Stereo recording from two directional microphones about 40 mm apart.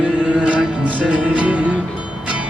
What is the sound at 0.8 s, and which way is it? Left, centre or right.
Music, right.